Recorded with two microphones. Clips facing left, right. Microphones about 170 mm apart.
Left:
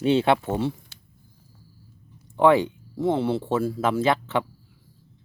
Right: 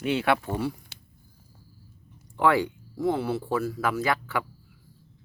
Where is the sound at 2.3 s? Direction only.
20° left (ahead or behind).